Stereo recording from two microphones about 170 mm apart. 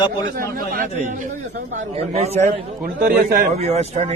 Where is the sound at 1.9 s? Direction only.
35° right (ahead or behind).